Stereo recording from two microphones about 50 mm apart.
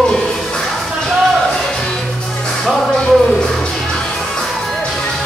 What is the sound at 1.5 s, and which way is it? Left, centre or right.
Music, centre.